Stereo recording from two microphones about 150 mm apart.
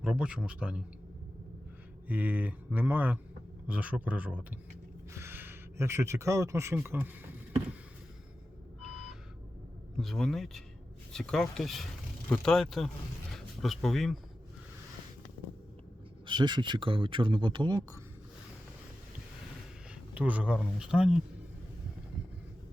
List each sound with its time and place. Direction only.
0.0 s speech: 5° right (ahead or behind)
2.0 s speech: 10° right (ahead or behind)
5.1 s a sound: 15° right (ahead or behind)
8.8 s a sound: 5° right (ahead or behind)
10.0 s speech: 5° left (ahead or behind)
16.2 s speech: 30° right (ahead or behind)
20.1 s speech: 10° right (ahead or behind)